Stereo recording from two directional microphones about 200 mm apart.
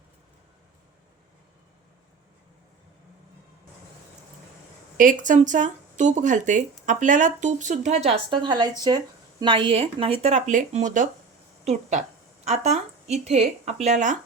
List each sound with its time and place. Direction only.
4.9 s speech: 40° right (ahead or behind)